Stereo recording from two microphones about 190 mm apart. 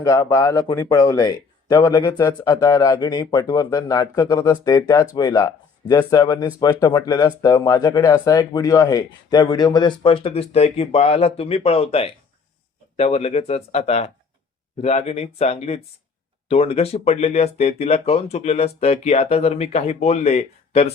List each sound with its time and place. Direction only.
0.0 s speech: 20° left (ahead or behind)